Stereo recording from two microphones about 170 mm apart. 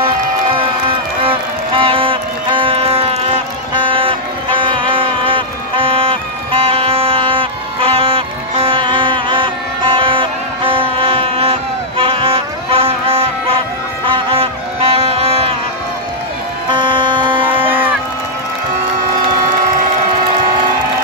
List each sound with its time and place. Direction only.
0.6 s music: 30° right (ahead or behind)
16.7 s music: 30° right (ahead or behind)